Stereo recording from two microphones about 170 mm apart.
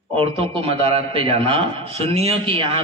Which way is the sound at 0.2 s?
30° right (ahead or behind).